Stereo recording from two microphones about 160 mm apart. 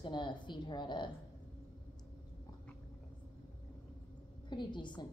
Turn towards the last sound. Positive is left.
turn(degrees=30)  # may be behind; listen again after turning